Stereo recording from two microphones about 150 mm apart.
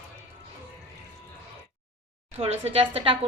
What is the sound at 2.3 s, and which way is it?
Speech, 40° right (ahead or behind).